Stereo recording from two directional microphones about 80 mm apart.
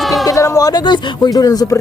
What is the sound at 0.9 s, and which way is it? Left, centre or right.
Speech, left.